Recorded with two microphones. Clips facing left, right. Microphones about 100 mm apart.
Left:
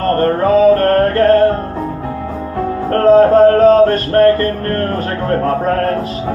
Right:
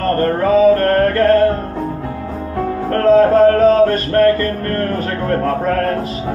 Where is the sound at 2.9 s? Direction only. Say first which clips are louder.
Left 3 dB; 35° left (ahead or behind).